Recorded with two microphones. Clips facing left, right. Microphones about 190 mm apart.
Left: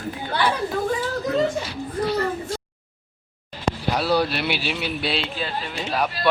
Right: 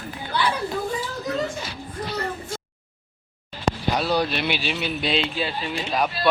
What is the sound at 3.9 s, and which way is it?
Speech, 5° left (ahead or behind).